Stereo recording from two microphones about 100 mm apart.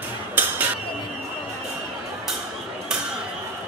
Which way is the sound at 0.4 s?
20° right (ahead or behind).